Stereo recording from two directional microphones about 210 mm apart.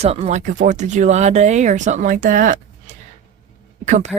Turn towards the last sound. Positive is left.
turn(degrees=-35)  # may be behind; listen again after turning